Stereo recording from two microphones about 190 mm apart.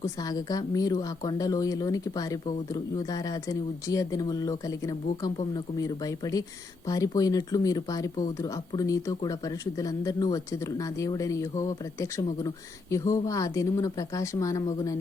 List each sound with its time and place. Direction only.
0.0 s a woman's voice: 20° left (ahead or behind)